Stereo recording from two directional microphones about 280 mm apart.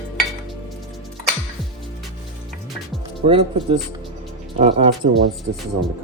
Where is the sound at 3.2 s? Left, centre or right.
Centre.